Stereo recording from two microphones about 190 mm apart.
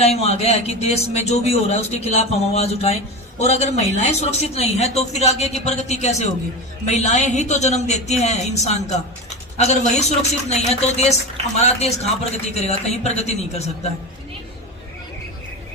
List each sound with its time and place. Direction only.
0.0 s a man's voice: 35° left (ahead or behind)